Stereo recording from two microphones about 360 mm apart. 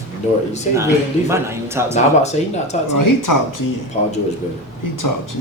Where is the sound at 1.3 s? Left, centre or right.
Centre.